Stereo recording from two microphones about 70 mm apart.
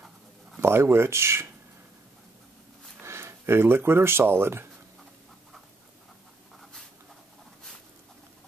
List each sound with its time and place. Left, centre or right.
0.6 s speech: right
3.0 s speech: right